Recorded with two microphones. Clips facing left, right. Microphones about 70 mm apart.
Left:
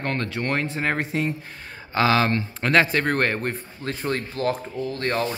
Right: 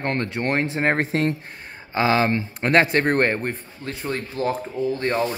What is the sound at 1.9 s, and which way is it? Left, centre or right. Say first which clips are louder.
Speech: even; right.